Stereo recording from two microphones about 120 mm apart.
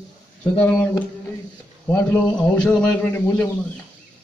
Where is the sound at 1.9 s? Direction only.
15° left (ahead or behind).